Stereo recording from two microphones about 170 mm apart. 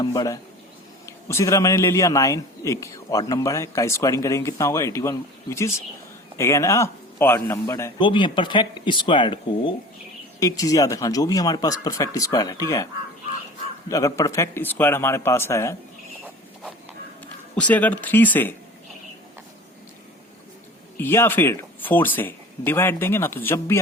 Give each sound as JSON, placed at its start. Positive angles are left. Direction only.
{"t": 0.0, "sound": "a man's voice", "side_deg": 20}
{"t": 7.9, "sound": "a man's voice", "side_deg": 30}
{"t": 17.5, "sound": "a man's voice", "side_deg": 10}
{"t": 21.0, "sound": "a man's voice", "side_deg": 15}